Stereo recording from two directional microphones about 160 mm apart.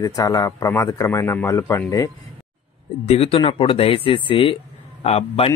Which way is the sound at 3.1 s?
35° left (ahead or behind).